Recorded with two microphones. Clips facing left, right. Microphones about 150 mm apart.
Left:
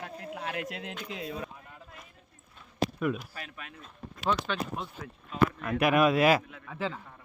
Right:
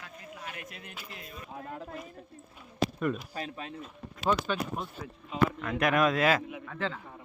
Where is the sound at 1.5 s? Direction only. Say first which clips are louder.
Right 9 dB; 65° right (ahead or behind).